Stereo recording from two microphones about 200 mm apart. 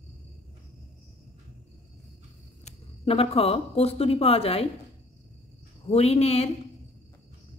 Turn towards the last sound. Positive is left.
turn(degrees=30)  # may be behind; listen again after turning